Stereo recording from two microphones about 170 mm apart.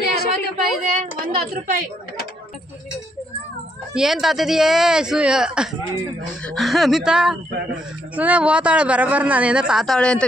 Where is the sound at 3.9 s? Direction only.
5° right (ahead or behind).